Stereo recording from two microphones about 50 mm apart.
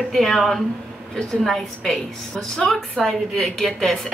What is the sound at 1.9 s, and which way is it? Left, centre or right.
A woman's voice, centre.